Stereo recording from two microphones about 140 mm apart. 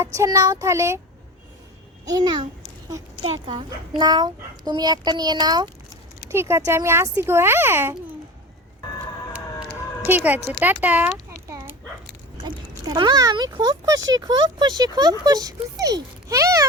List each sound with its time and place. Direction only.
0.0 s speech: 20° right (ahead or behind)
2.0 s a child's voice: 30° right (ahead or behind)
3.9 s speech: 30° right (ahead or behind)
6.3 s a child's voice: 20° right (ahead or behind)
10.0 s a child's voice: 15° right (ahead or behind)
11.4 s dog: 20° right (ahead or behind)
12.8 s speech: 30° right (ahead or behind)